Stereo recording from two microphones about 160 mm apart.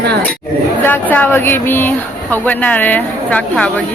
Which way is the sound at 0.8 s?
15° left (ahead or behind).